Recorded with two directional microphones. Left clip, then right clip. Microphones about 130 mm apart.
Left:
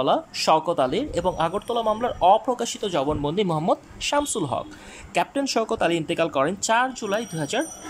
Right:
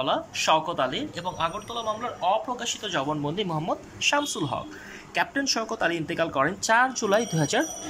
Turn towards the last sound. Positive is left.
turn(degrees=5)  # may be behind; listen again after turning